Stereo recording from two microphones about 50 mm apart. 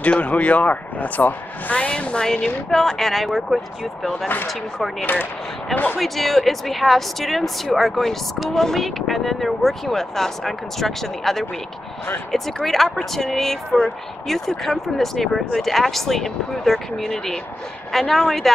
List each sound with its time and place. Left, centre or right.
0.0 s speech: left; by 4.9 s centre
5.0 s speech: left
5.9 s speech: centre